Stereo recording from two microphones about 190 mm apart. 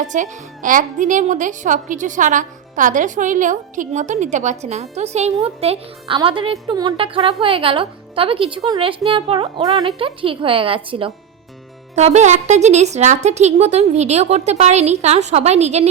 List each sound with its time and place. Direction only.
0.0 s a woman's voice: 40° right (ahead or behind)